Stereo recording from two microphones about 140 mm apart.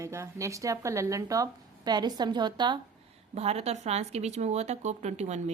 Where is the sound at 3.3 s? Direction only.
50° right (ahead or behind).